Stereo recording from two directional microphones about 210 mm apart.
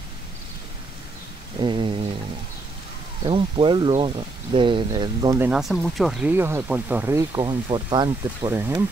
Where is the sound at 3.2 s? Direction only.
25° right (ahead or behind).